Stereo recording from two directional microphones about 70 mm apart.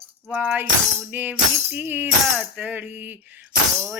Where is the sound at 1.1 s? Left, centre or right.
Right.